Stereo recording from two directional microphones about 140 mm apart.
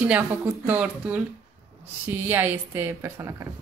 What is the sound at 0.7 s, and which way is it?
A woman's voice, 10° right (ahead or behind).